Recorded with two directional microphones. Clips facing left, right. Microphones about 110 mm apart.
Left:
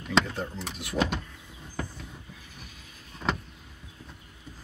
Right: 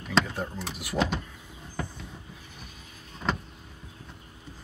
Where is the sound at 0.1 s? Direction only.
10° right (ahead or behind).